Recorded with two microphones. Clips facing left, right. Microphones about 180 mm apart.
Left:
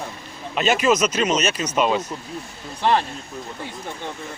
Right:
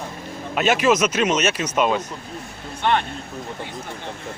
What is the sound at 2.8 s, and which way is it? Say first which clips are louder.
Speech: left 1 dB; 30° left (ahead or behind).